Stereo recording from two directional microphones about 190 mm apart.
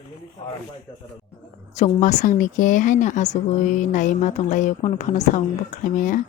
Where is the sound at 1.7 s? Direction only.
40° left (ahead or behind).